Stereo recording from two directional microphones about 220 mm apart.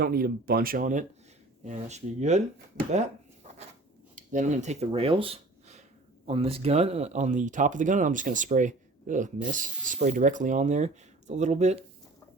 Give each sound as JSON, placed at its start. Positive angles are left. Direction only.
{"t": 0.0, "sound": "speech", "side_deg": -45}
{"t": 2.9, "sound": "a sound", "side_deg": -30}
{"t": 4.1, "sound": "speech", "side_deg": -35}